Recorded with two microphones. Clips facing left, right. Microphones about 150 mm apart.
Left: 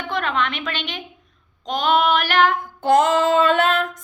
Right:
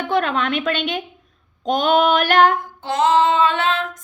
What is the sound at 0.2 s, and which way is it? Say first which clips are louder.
Child singing: right 3 dB; 40° right (ahead or behind).